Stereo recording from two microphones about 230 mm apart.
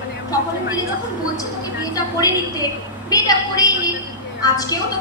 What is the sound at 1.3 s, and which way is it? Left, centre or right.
A woman's voice, centre.